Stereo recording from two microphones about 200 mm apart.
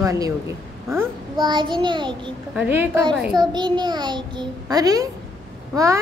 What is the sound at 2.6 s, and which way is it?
Speech, 10° right (ahead or behind).